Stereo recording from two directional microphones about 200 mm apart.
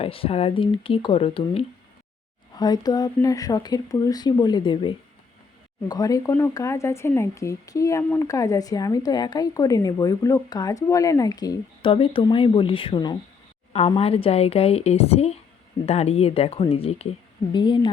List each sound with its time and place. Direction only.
0.0 s a woman's voice: 30° left (ahead or behind)